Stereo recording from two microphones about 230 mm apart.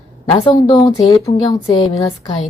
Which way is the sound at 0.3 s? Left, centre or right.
Left.